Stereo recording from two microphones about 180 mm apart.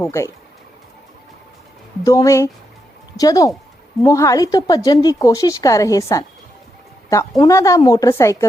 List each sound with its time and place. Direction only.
0.0 s a woman's voice: 15° left (ahead or behind)
2.0 s a woman's voice: 20° left (ahead or behind)